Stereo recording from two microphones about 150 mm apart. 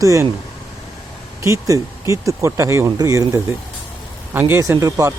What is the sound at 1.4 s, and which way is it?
Speech, 20° right (ahead or behind).